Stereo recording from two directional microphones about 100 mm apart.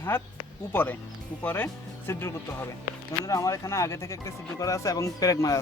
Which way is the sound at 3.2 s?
35° left (ahead or behind).